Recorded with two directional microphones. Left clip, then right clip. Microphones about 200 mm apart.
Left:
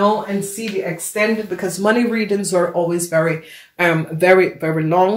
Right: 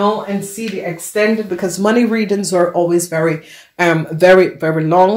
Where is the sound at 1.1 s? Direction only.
50° right (ahead or behind).